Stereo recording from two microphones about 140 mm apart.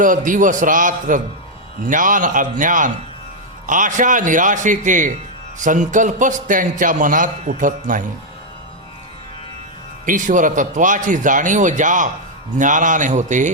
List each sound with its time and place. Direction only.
0.3 s a man's voice: 70° right (ahead or behind)
10.1 s a man's voice: 65° right (ahead or behind)